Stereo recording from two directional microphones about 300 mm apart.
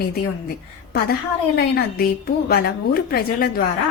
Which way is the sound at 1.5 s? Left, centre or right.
Left.